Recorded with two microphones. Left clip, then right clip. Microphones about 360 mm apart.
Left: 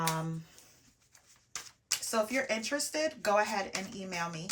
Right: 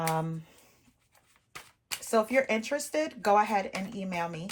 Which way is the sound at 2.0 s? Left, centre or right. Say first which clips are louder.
Right 6 dB; centre.